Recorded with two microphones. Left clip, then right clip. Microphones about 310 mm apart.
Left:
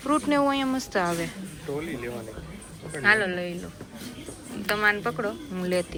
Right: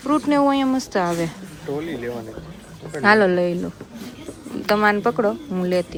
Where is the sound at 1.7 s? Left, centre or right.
Right.